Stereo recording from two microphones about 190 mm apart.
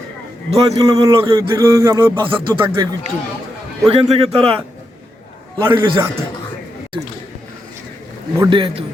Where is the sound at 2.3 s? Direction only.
25° right (ahead or behind).